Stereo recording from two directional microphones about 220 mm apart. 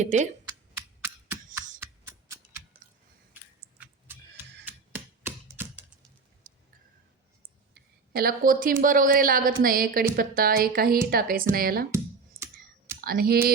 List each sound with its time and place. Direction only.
0.0 s speech: 30° right (ahead or behind)
0.4 s computer keyboard: 10° right (ahead or behind)
1.8 s a sound: 15° right (ahead or behind)
4.6 s typewriter: 10° right (ahead or behind)
6.5 s a sound: 40° right (ahead or behind)
7.7 s a woman's voice: 40° right (ahead or behind)
12.4 s computer keyboard: 40° right (ahead or behind)
13.0 s speech: 45° right (ahead or behind)